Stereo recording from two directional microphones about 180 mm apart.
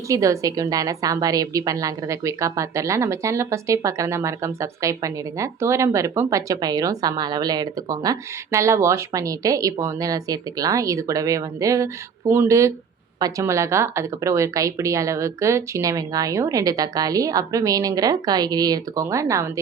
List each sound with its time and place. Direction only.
0.1 s a woman's voice: 20° right (ahead or behind)